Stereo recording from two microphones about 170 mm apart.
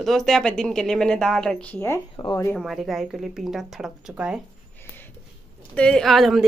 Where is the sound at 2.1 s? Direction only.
30° left (ahead or behind).